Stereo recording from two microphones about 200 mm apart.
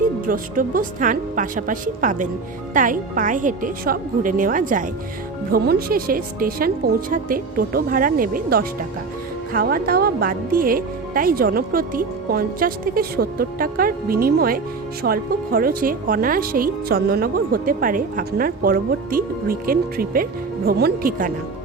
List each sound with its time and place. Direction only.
0.3 s speech: 45° right (ahead or behind)